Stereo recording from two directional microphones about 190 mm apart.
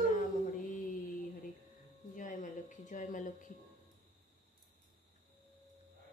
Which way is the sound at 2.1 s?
40° left (ahead or behind).